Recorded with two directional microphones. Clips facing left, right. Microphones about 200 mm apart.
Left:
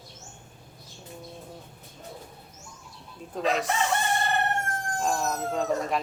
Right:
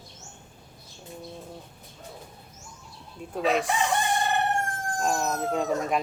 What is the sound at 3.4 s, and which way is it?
Speech, 10° right (ahead or behind).